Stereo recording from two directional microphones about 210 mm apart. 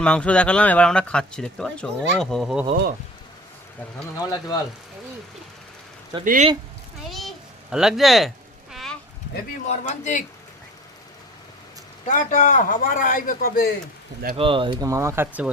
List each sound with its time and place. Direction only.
0.0 s speech: 5° left (ahead or behind)
4.2 s speech: 20° left (ahead or behind)
6.2 s speech: 40° right (ahead or behind)
7.1 s a sound: centre (ahead or behind)
9.6 s speech: 35° left (ahead or behind)
12.0 s speech: 35° left (ahead or behind)
14.3 s speech: 25° right (ahead or behind); by 15.4 s 10° right (ahead or behind)